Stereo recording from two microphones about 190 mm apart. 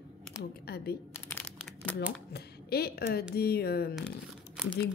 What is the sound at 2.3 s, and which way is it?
A woman's voice, 55° left (ahead or behind).